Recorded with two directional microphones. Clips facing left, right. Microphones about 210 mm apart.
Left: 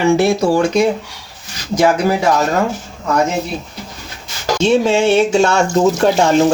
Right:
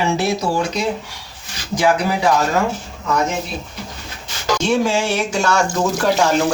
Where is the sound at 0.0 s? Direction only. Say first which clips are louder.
Left 6 dB; 55° left (ahead or behind).